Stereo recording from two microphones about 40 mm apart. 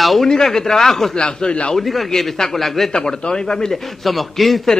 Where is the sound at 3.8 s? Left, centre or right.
Centre.